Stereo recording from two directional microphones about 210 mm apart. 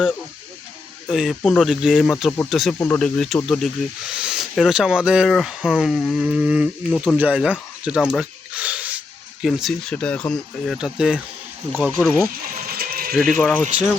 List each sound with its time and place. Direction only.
1.0 s speech: centre (ahead or behind)
2.7 s speech: 10° left (ahead or behind); by 12.0 s 10° right (ahead or behind)
12.6 s mechanisms: 45° right (ahead or behind)
13.1 s speech: centre (ahead or behind)